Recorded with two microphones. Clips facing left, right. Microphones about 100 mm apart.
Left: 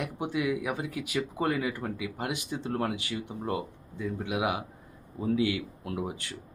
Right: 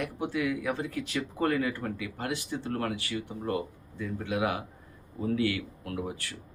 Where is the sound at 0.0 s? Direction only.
20° left (ahead or behind).